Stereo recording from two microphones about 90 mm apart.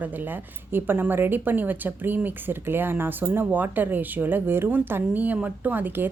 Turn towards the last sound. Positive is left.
turn(degrees=-20)  # may be behind; listen again after turning